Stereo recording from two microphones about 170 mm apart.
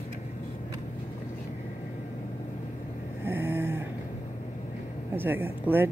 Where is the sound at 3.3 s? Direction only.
10° right (ahead or behind).